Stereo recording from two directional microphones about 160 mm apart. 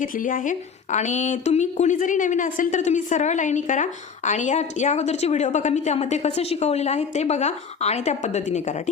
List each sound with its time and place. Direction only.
0.0 s a woman's voice: 55° left (ahead or behind)